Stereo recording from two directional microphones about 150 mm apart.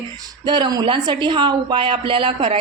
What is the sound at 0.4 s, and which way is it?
A woman's voice, 30° right (ahead or behind).